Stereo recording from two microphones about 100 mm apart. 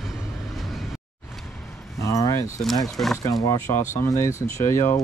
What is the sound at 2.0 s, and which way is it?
Keys jangling, 30° left (ahead or behind).